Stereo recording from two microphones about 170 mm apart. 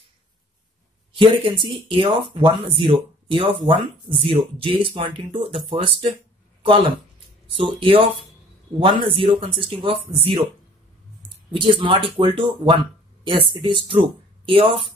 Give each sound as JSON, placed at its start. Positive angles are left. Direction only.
{"t": 1.2, "sound": "speech", "side_deg": -30}
{"t": 7.5, "sound": "speech", "side_deg": -30}
{"t": 11.6, "sound": "speech", "side_deg": -30}